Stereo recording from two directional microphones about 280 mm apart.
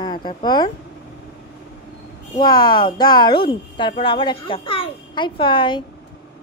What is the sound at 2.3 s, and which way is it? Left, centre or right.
A child's voice, centre.